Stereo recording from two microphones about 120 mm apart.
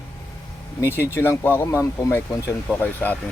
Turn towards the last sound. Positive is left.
turn(degrees=15)  # may be behind; listen again after turning